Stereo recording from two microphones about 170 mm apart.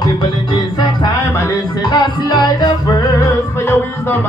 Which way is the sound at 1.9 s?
25° left (ahead or behind).